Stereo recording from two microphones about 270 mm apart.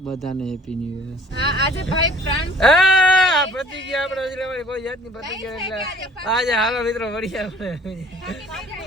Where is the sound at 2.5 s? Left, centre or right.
Centre.